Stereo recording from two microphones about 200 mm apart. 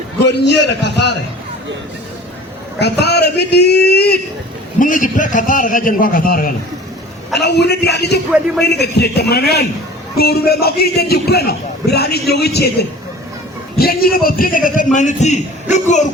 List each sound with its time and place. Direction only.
0.3 s speech: 60° left (ahead or behind)
3.0 s speech: 55° left (ahead or behind)
4.8 s a man's voice: 40° left (ahead or behind)
13.7 s a man's voice: 50° left (ahead or behind)